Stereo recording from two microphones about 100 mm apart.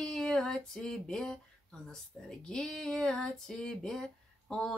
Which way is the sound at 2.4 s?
5° left (ahead or behind).